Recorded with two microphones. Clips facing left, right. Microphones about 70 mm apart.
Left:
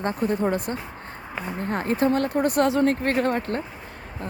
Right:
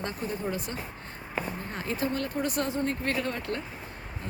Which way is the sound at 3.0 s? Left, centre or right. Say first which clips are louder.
Left 8 dB; left.